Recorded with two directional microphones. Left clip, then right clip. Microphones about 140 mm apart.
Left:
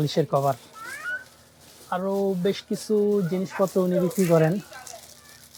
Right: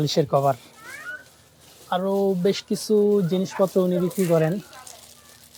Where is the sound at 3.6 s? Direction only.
5° right (ahead or behind).